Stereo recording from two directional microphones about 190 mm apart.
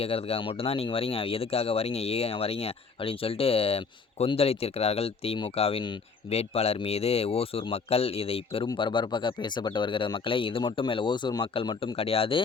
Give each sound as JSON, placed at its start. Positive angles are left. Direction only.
{"t": 0.0, "sound": "speech", "side_deg": 30}